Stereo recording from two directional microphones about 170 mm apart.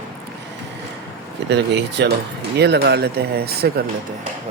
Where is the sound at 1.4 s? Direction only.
85° right; by 3.8 s 65° right (ahead or behind).